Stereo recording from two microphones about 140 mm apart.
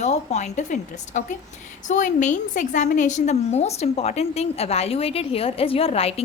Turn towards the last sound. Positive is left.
turn(degrees=45)  # may be behind; listen again after turning